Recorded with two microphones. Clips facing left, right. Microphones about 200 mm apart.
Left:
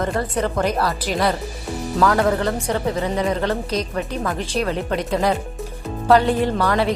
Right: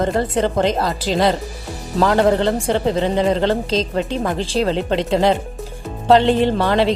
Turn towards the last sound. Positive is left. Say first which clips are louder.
# right 3 dB
turn(degrees=-25)  # may be behind; listen again after turning